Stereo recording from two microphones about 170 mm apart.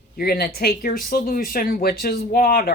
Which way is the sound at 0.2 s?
65° left (ahead or behind).